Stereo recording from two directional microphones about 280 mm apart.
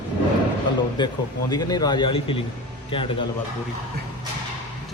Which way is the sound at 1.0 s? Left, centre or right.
Centre.